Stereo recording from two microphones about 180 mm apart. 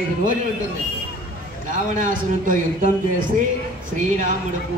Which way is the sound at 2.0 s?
50° right (ahead or behind).